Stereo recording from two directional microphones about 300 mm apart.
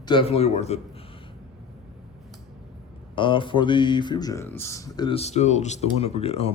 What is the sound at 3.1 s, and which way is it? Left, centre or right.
Speech, centre.